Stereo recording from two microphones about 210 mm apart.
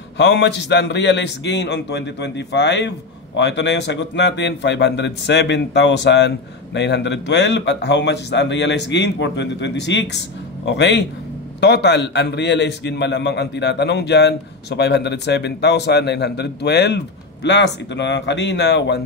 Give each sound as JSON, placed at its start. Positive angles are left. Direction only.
{"t": 0.2, "sound": "a man's voice", "side_deg": 55}